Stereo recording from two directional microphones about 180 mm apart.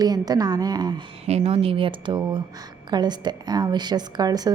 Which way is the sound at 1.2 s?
35° right (ahead or behind).